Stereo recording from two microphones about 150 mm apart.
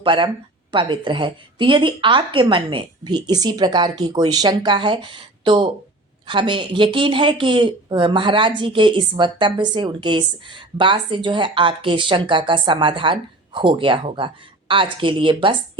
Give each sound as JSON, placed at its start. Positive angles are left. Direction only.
{"t": 0.0, "sound": "speech", "side_deg": -35}